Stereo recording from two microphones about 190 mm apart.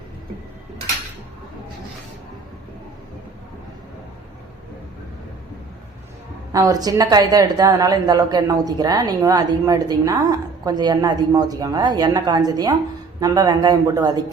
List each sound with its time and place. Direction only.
6.5 s a woman's voice: 20° right (ahead or behind)